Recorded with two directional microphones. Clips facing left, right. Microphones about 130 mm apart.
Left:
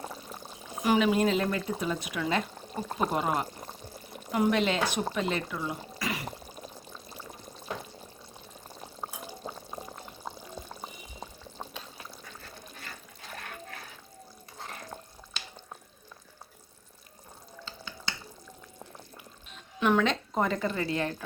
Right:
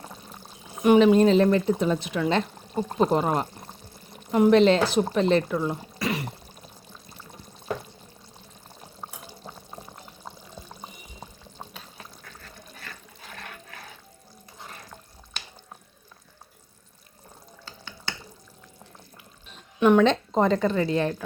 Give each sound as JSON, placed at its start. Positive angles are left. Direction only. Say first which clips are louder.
{"t": 0.9, "sound": "speech", "louder": "right 8 dB", "side_deg": -30}
{"t": 19.8, "sound": "speech", "louder": "right 7 dB", "side_deg": -20}